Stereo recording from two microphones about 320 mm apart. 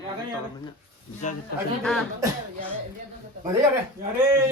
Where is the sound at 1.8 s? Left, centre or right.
Centre.